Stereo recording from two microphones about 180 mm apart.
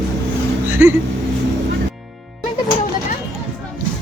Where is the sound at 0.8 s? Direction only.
15° right (ahead or behind).